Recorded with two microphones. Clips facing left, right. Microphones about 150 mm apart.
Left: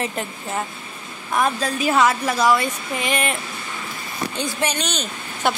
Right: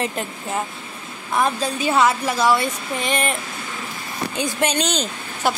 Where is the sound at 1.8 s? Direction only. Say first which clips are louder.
Even; 25° right (ahead or behind).